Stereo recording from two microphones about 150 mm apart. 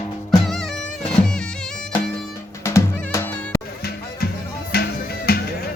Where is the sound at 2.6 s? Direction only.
20° left (ahead or behind).